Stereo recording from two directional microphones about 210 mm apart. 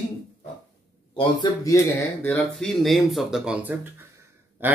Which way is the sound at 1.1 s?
20° left (ahead or behind).